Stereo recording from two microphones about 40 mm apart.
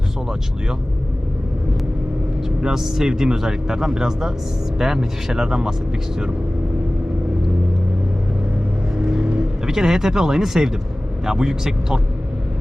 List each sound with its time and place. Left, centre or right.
2.4 s speech: centre
9.0 s vehicle: centre
9.6 s speech: centre